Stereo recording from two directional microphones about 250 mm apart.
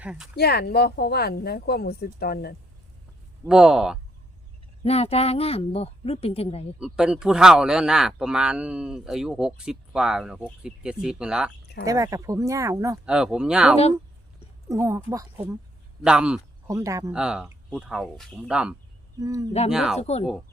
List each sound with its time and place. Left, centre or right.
0.0 s speech: centre
0.3 s speech: left
3.4 s speech: centre
4.8 s a woman's voice: left
6.7 s speech: centre
19.7 s speech: centre
20.0 s a woman's voice: left